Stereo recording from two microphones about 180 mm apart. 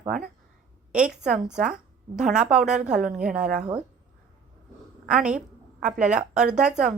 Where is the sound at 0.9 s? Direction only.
5° right (ahead or behind).